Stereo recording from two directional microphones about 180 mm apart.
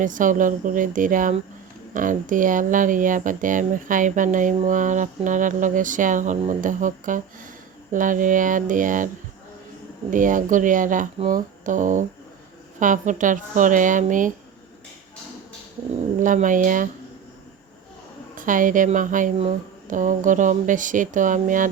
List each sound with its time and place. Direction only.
0.0 s speech: 45° right (ahead or behind)
10.1 s speech: 45° right (ahead or behind)
11.3 s a sound: 45° right (ahead or behind)
12.8 s speech: 45° right (ahead or behind)
16.2 s speech: 45° right (ahead or behind)
18.3 s speech: 50° right (ahead or behind)